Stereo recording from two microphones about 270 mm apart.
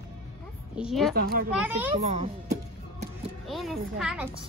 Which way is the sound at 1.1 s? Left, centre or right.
Right.